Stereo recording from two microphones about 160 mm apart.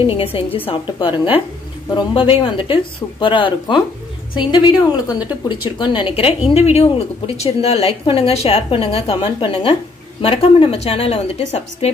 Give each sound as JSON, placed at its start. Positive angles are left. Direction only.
{"t": 0.0, "sound": "a woman's voice", "side_deg": 35}